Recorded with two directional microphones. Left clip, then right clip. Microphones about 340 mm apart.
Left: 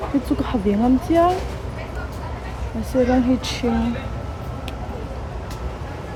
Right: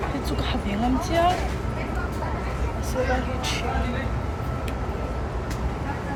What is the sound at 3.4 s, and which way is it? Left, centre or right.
Speech, left.